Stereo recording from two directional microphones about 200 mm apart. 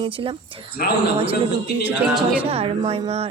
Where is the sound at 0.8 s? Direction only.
45° left (ahead or behind).